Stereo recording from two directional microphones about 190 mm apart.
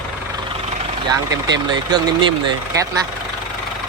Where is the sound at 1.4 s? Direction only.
20° right (ahead or behind).